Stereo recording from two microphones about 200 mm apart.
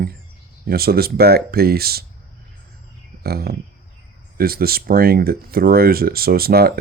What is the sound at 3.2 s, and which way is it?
Speech, 50° right (ahead or behind).